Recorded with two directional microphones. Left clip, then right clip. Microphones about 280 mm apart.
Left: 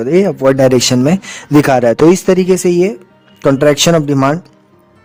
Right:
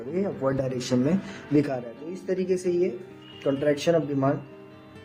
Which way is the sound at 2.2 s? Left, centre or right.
Left.